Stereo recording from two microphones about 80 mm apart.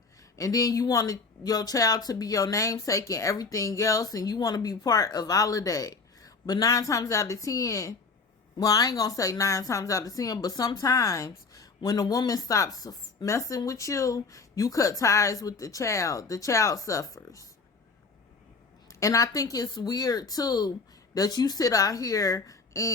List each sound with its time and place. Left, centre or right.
0.3 s speech: left
18.9 s speech: left